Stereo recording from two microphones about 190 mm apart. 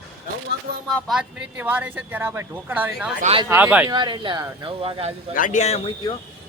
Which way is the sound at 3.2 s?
35° right (ahead or behind).